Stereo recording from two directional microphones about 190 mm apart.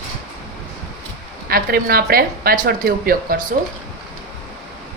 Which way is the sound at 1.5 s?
50° right (ahead or behind).